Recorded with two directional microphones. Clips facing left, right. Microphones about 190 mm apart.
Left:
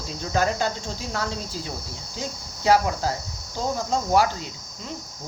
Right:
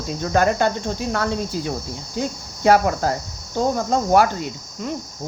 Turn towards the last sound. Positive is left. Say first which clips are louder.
# right 9 dB
turn(degrees=-55)  # may be behind; listen again after turning